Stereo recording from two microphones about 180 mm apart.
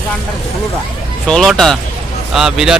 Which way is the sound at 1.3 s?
5° left (ahead or behind).